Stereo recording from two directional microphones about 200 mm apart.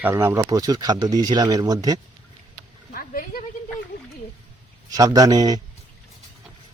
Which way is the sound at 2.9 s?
45° left (ahead or behind).